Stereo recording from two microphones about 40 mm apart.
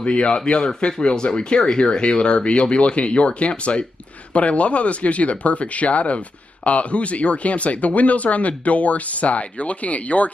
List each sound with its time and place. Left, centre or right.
0.0 s speech: left